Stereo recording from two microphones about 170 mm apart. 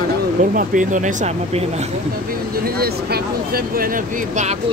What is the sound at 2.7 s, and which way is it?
Speech, 65° right (ahead or behind).